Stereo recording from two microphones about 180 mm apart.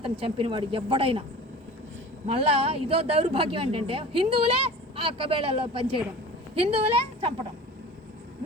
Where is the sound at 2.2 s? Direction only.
30° right (ahead or behind).